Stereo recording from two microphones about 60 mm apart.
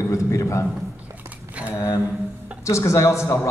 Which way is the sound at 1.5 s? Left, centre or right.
Right.